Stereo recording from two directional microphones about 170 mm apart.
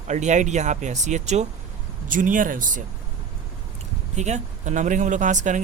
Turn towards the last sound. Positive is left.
turn(degrees=-45)  # may be behind; listen again after turning